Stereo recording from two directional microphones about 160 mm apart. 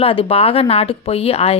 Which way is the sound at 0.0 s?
35° left (ahead or behind).